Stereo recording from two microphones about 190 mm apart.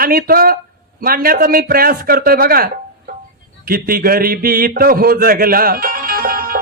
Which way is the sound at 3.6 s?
50° right (ahead or behind).